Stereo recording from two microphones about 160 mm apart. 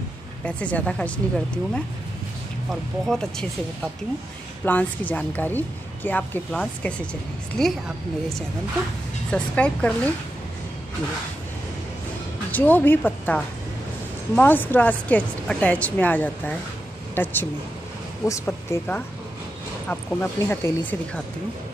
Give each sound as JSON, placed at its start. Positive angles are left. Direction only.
{"t": 0.5, "sound": "a woman's voice", "side_deg": 10}
{"t": 2.7, "sound": "a woman's voice", "side_deg": 5}
{"t": 9.3, "sound": "a woman's voice", "side_deg": 5}
{"t": 12.4, "sound": "a woman's voice", "side_deg": 10}